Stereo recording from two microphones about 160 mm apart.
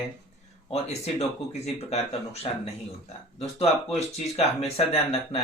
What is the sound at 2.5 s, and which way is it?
Speech, 40° left (ahead or behind).